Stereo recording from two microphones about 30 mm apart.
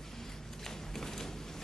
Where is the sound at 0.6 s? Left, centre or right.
Centre.